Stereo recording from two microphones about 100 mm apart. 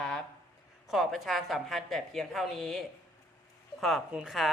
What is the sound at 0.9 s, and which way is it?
Speech, centre (ahead or behind).